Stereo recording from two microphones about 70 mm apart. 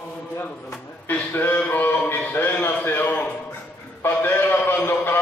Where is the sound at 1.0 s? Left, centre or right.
Left.